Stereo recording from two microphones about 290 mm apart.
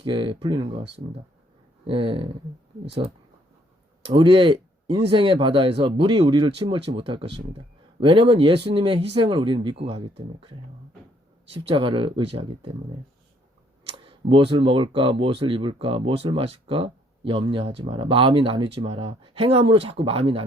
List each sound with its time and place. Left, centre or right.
0.0 s speech: centre
1.9 s speech: centre
4.0 s speech: centre
11.7 s speech: centre
14.0 s speech: centre